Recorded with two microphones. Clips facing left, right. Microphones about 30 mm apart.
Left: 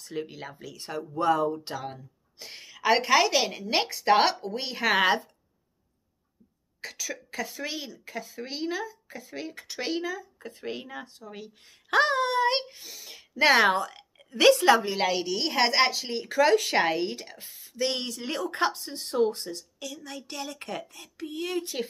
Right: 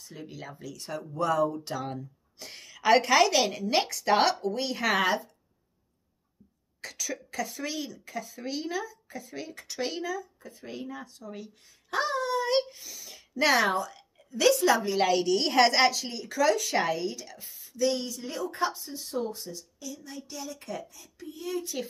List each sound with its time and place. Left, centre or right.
0.3 s a woman's voice: left
5.0 s speech: left
6.8 s speech: centre
7.6 s speech: left
10.4 s speech: left
10.7 s speech: left
11.1 s a woman's voice: centre
11.9 s a child's voice: left
13.7 s a woman's voice: left
14.8 s a woman's voice: centre
15.9 s speech: left